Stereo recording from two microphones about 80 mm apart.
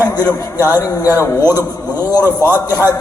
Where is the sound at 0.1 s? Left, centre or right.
Left.